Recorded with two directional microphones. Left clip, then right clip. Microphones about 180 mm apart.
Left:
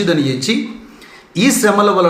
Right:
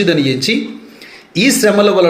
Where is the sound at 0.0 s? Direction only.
15° right (ahead or behind).